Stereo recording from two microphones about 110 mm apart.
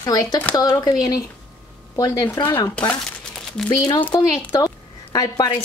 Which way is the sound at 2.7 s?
10° left (ahead or behind).